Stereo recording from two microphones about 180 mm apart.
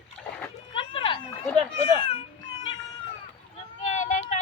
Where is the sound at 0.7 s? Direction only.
30° left (ahead or behind).